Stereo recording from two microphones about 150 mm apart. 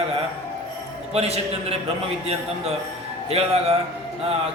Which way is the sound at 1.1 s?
45° right (ahead or behind).